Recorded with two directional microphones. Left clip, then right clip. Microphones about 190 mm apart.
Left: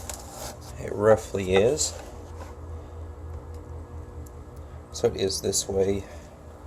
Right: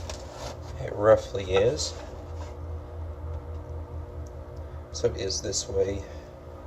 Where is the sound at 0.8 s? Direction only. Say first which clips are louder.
Even; 60° left (ahead or behind).